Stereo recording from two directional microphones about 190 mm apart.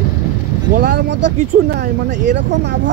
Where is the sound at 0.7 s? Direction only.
55° right (ahead or behind).